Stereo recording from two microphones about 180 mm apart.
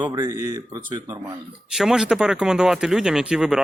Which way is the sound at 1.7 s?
5° right (ahead or behind).